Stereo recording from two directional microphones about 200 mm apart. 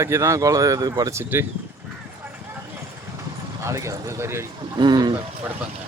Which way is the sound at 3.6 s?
15° right (ahead or behind).